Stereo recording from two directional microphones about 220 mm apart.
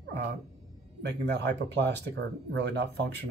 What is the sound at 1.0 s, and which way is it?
Speech, 50° right (ahead or behind).